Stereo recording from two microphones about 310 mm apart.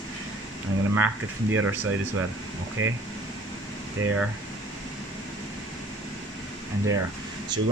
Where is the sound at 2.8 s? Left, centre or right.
Right.